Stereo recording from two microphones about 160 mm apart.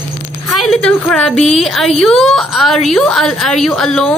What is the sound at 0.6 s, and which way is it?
A woman's voice, 5° left (ahead or behind).